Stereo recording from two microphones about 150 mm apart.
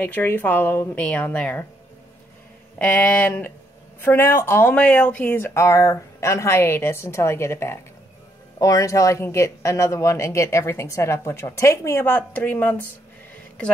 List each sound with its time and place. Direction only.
0.0 s speech: 15° left (ahead or behind)
2.8 s speech: 10° left (ahead or behind)